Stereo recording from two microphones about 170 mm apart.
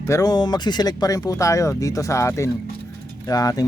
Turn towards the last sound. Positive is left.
turn(degrees=20)  # may be behind; listen again after turning